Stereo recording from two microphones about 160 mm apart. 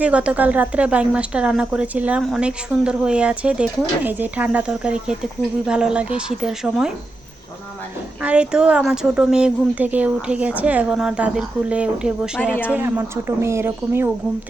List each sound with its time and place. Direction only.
0.0 s a woman's voice: 5° right (ahead or behind)
8.2 s a woman's voice: 5° right (ahead or behind)